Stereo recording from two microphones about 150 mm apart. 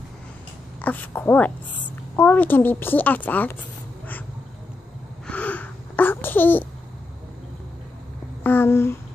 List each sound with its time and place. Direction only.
0.7 s a woman's voice: 10° left (ahead or behind)
5.2 s babbling: 10° left (ahead or behind)
8.5 s a sound: 15° left (ahead or behind)